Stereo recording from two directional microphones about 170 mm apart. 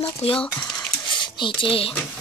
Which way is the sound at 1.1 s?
30° left (ahead or behind).